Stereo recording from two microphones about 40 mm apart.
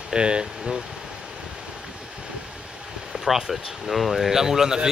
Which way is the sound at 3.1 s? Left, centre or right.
Centre.